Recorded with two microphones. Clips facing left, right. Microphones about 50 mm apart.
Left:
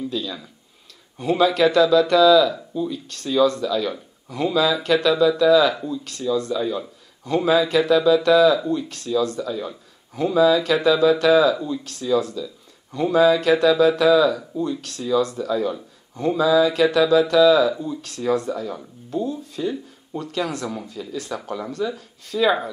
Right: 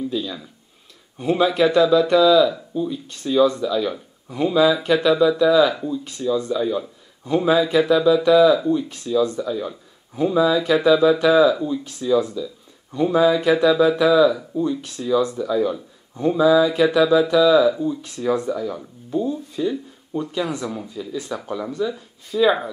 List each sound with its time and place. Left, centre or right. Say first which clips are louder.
1.1 s speech: even; centre
6.6 s speech: right 2 dB; centre
9.5 s speech: right 2 dB; centre
11.8 s speech: right 1 dB; centre
15.4 s a man's voice: right 2 dB; centre
18.3 s speech: right 1 dB; right
21.0 s speech: right 1 dB; centre